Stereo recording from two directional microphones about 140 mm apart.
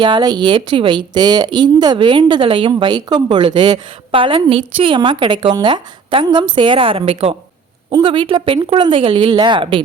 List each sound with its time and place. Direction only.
0.0 s a woman's voice: 30° right (ahead or behind)
7.9 s a woman's voice: 35° right (ahead or behind)